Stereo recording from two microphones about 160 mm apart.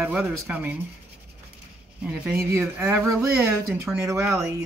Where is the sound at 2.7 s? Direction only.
5° right (ahead or behind).